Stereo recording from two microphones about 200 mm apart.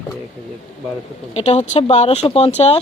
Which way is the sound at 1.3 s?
30° left (ahead or behind).